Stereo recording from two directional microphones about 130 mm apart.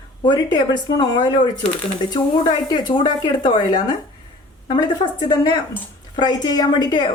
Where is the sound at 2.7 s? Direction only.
35° left (ahead or behind).